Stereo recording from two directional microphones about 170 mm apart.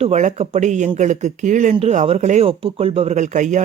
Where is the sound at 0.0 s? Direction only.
45° right (ahead or behind).